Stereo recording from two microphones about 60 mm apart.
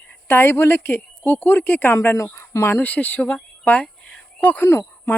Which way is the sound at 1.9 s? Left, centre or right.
Left.